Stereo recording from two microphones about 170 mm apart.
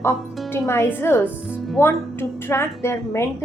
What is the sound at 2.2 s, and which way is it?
Speech, 15° left (ahead or behind).